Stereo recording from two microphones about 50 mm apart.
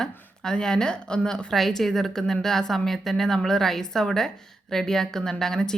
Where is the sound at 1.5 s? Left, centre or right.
Centre.